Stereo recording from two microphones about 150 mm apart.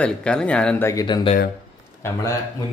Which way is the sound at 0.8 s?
25° left (ahead or behind).